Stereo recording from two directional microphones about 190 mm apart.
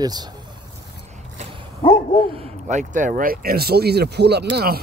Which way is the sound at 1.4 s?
25° right (ahead or behind).